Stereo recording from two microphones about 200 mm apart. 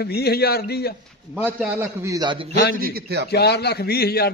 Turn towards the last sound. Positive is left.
turn(degrees=50)  # may be behind; listen again after turning